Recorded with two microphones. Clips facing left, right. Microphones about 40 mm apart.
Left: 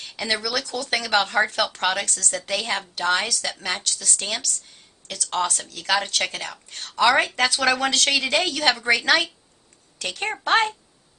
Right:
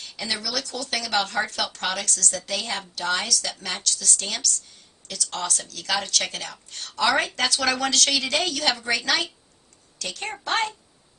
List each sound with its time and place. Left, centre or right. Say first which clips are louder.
0.0 s speech: left 4 dB; left
2.0 s speech: right 2 dB; left
2.5 s speech: left 3 dB; left
3.2 s speech: left 2 dB; left
5.0 s speech: left 5 dB; left
6.5 s speech: left 2 dB; centre; by 10.8 s left